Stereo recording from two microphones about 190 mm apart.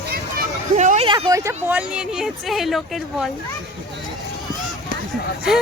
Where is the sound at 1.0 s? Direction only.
20° right (ahead or behind); by 3.3 s centre (ahead or behind).